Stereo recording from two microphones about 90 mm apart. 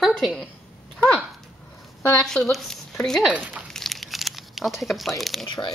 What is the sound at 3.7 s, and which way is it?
Crumpling, 5° left (ahead or behind).